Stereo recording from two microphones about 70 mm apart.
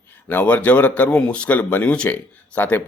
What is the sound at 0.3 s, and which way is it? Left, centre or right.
Speech, left.